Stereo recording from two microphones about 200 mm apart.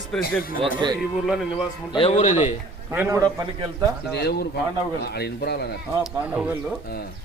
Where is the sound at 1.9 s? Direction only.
30° left (ahead or behind).